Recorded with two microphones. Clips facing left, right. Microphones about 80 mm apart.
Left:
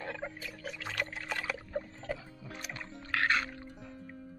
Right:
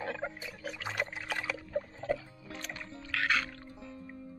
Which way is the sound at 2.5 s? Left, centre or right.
Centre.